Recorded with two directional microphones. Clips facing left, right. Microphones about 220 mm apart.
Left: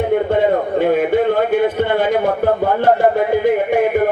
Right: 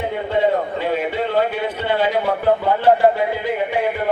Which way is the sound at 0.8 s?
50° left (ahead or behind).